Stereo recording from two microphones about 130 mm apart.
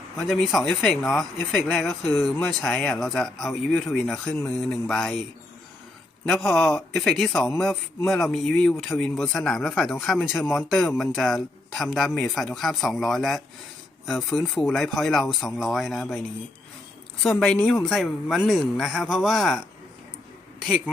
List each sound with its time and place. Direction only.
0.3 s speech: 5° left (ahead or behind)
6.2 s speech: 5° left (ahead or behind)
7.3 s a man's voice: 25° left (ahead or behind)
7.6 s speech: 5° left (ahead or behind)
17.2 s speech: centre (ahead or behind)